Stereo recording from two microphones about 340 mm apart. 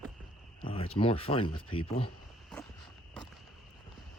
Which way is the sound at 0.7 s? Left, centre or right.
Centre.